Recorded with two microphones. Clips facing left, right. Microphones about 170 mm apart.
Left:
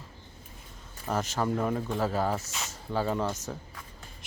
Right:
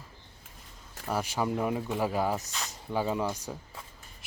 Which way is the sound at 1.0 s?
10° right (ahead or behind).